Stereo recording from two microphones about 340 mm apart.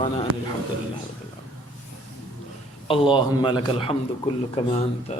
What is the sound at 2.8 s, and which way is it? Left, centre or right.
A man's voice, centre.